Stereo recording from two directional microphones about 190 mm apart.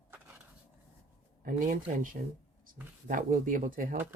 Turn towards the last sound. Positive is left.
turn(degrees=-45)  # may be behind; listen again after turning